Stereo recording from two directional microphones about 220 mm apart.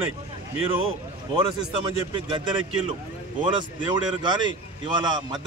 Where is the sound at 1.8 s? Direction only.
20° right (ahead or behind).